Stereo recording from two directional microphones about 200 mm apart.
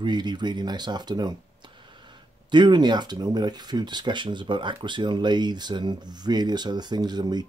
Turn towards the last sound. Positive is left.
turn(degrees=-20)  # may be behind; listen again after turning